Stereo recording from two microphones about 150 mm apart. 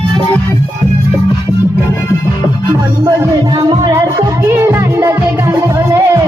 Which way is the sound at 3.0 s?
25° right (ahead or behind).